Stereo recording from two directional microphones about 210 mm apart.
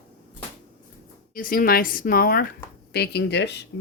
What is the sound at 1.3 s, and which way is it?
Speech, 45° left (ahead or behind).